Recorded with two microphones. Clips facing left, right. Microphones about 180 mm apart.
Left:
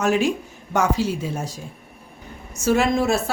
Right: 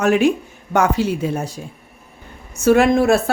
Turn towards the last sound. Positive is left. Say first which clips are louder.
# right 6 dB
turn(degrees=-60)  # may be behind; listen again after turning